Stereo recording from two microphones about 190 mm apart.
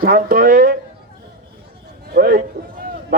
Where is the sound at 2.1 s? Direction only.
50° right (ahead or behind).